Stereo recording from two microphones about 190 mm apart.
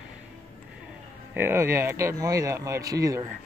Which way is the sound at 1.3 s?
10° right (ahead or behind).